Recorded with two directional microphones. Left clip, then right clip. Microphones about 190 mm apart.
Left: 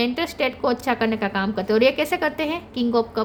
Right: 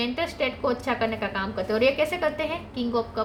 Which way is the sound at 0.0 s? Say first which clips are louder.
Left 4 dB; 60° left (ahead or behind).